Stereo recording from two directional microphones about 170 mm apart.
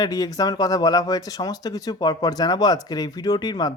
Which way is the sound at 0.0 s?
20° left (ahead or behind).